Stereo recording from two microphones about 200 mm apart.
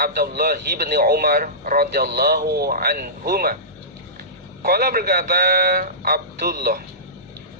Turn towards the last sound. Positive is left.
turn(degrees=-50)  # may be behind; listen again after turning